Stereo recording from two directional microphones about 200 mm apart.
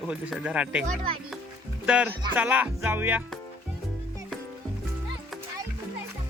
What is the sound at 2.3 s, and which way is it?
Music, 5° right (ahead or behind).